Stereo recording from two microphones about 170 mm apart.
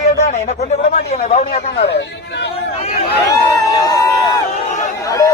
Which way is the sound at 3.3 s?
20° left (ahead or behind).